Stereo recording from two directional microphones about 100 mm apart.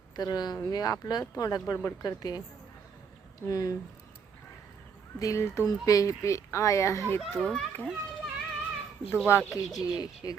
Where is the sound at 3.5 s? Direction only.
35° left (ahead or behind).